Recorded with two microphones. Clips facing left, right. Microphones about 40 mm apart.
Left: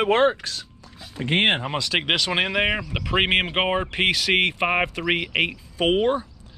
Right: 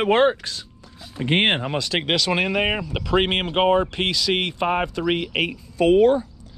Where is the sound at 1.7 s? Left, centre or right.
Left.